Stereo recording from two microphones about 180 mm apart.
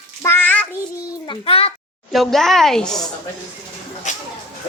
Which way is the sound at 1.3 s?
30° left (ahead or behind).